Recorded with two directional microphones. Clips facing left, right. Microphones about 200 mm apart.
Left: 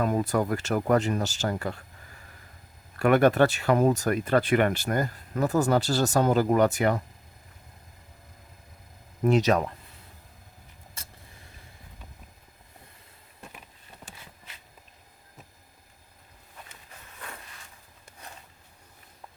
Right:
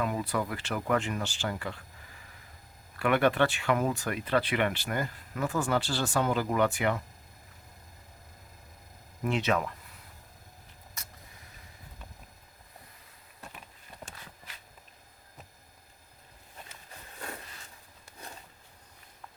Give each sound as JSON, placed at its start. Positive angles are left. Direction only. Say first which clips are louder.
{"t": 0.0, "sound": "speech", "louder": "left 6 dB", "side_deg": 45}
{"t": 3.0, "sound": "speech", "louder": "left 5 dB", "side_deg": 45}
{"t": 9.2, "sound": "speech", "louder": "left 7 dB", "side_deg": 40}
{"t": 11.0, "sound": "vehicle", "louder": "even", "side_deg": 30}